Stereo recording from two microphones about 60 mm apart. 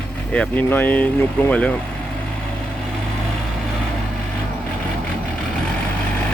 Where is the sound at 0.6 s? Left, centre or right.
Left.